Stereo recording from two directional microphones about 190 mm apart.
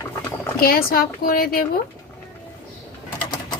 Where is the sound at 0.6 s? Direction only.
50° left (ahead or behind).